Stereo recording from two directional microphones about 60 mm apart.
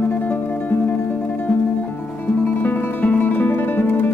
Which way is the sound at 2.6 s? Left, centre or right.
Left.